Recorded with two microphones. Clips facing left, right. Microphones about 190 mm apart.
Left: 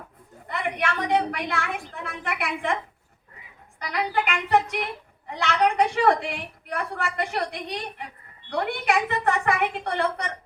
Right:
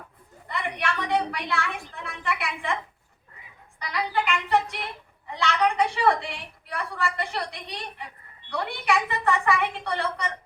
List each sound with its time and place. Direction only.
0.4 s a woman's voice: 45° left (ahead or behind)
3.8 s a woman's voice: 50° left (ahead or behind)